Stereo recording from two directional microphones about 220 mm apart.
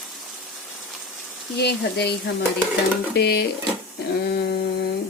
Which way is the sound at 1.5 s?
50° left (ahead or behind).